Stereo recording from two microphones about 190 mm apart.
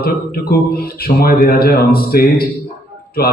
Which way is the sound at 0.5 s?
55° left (ahead or behind).